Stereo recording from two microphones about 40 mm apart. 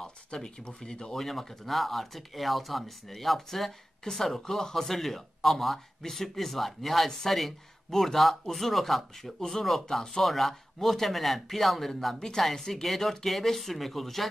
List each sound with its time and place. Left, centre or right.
0.0 s speech: centre
1.1 s speech: centre